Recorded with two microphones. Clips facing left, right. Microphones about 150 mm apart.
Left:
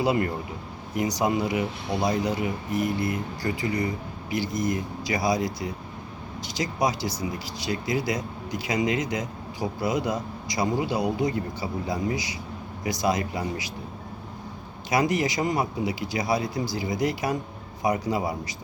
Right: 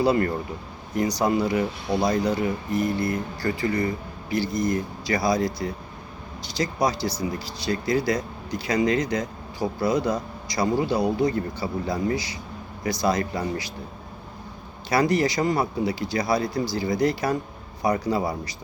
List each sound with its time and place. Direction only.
0.0 s speech: 15° left (ahead or behind)
14.8 s speech: 15° left (ahead or behind)